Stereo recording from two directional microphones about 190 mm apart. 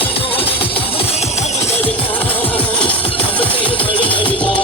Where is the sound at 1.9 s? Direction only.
10° left (ahead or behind).